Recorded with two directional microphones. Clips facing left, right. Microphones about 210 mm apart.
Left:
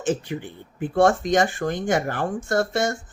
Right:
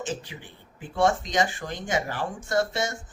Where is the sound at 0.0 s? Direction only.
55° left (ahead or behind).